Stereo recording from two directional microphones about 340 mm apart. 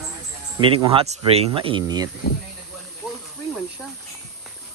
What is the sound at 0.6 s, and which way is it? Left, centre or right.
Speech, centre.